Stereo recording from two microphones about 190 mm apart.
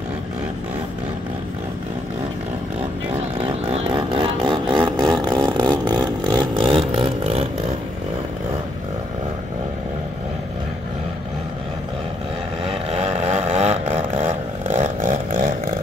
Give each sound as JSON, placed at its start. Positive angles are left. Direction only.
{"t": 3.7, "sound": "vehicle", "side_deg": -30}
{"t": 12.7, "sound": "vehicle", "side_deg": -35}